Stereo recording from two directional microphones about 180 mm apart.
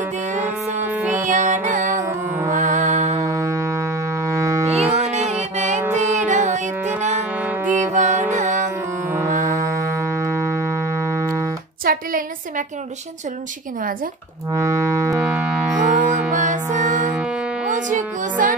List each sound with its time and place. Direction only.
0.9 s music: 10° right (ahead or behind)
1.2 s music: 45° right (ahead or behind)
2.0 s music: 15° right (ahead or behind)
2.5 s mantra: 40° right (ahead or behind)
3.2 s music: 15° right (ahead or behind)
4.6 s music: 35° right (ahead or behind)
6.8 s music: 10° right (ahead or behind)
7.7 s music: 40° right (ahead or behind)
9.5 s music: 15° right (ahead or behind)
11.8 s a sound: 50° right (ahead or behind)
14.5 s music: 15° right (ahead or behind)
15.9 s music: 45° right (ahead or behind)